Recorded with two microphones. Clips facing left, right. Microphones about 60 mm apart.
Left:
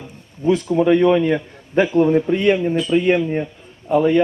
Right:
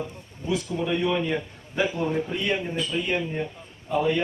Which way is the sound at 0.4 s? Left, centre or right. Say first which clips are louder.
Left 11 dB; left.